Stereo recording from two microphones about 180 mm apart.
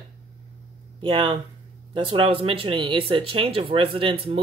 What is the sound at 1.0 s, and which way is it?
Speech, 30° right (ahead or behind).